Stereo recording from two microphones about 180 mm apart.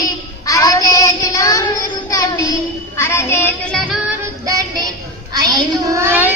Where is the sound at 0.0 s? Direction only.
20° left (ahead or behind).